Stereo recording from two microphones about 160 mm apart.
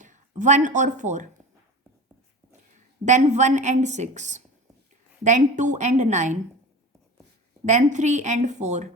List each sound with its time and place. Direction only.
0.0 s speech: 50° right (ahead or behind)
3.0 s a woman's voice: 45° right (ahead or behind)
7.6 s a woman's voice: 45° right (ahead or behind)